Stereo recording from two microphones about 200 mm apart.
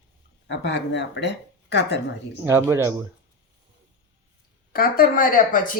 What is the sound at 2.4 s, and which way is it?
Speech, 15° right (ahead or behind).